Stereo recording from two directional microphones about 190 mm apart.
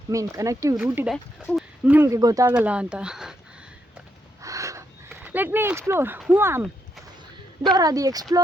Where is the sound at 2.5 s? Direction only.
5° right (ahead or behind).